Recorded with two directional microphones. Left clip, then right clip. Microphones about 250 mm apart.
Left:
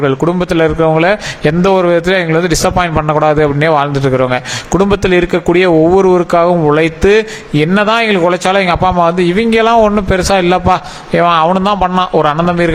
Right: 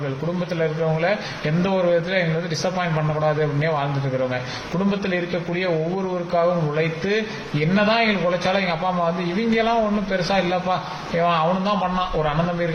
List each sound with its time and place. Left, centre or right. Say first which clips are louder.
0.6 s a man's voice: left 12 dB; left
4.9 s a man's voice: left 11 dB; left